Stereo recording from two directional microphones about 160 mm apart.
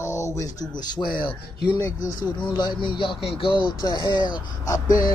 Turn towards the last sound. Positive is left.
turn(degrees=20)  # may be behind; listen again after turning